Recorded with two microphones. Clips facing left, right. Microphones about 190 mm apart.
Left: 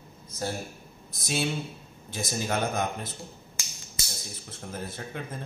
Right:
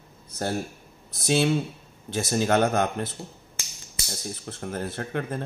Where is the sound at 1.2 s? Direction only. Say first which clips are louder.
Right 7 dB; 70° right (ahead or behind).